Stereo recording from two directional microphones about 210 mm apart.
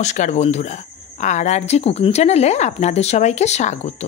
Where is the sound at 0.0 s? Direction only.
35° left (ahead or behind).